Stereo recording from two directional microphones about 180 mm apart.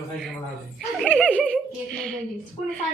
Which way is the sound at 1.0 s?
5° left (ahead or behind).